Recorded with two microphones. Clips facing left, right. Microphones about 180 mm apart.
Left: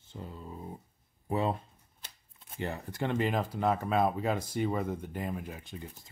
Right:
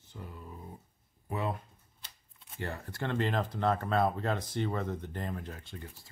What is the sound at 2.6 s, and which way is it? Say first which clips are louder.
Speech: left 3 dB; 15° left (ahead or behind).